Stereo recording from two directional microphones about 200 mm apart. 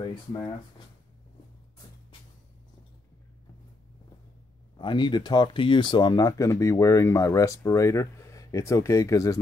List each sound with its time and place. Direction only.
4.7 s speech: 25° left (ahead or behind)